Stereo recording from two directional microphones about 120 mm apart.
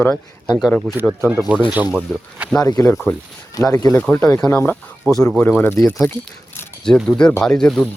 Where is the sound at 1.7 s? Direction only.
10° right (ahead or behind).